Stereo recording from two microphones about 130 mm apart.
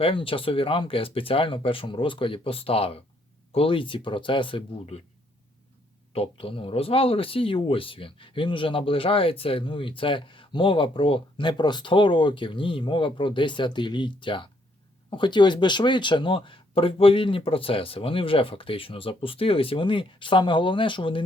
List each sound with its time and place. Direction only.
0.0 s speech: 45° left (ahead or behind)
6.1 s speech: 45° left (ahead or behind)